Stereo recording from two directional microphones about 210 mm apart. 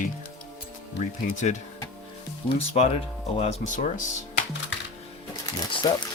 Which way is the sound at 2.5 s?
30° left (ahead or behind).